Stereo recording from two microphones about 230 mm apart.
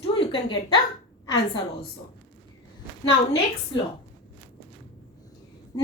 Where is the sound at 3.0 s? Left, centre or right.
Centre.